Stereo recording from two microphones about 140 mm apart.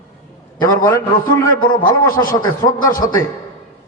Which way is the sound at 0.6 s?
25° left (ahead or behind).